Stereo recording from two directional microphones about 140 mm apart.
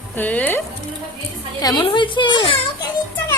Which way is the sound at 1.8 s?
35° left (ahead or behind).